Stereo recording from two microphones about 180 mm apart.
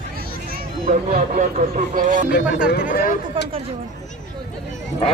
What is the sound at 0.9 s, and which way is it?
Speech, 45° right (ahead or behind).